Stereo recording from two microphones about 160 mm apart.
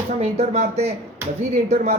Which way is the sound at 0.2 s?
40° right (ahead or behind).